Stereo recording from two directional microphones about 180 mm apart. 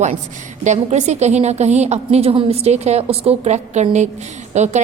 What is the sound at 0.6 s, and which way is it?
A woman's voice, 40° right (ahead or behind).